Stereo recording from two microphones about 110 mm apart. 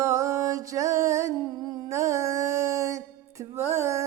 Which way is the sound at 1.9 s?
25° right (ahead or behind).